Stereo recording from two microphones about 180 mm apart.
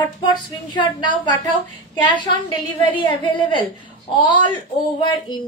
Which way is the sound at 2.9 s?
25° left (ahead or behind).